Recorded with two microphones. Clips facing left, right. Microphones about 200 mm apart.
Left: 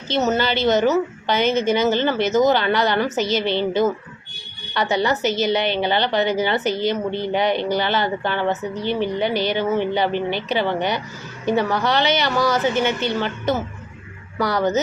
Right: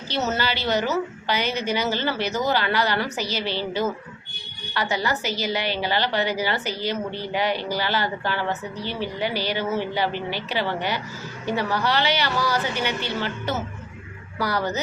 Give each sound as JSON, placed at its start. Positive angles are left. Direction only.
{"t": 0.1, "sound": "a woman's voice", "side_deg": 20}
{"t": 4.7, "sound": "a woman's voice", "side_deg": 20}